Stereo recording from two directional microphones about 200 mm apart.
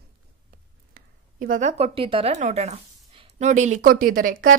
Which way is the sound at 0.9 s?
45° right (ahead or behind).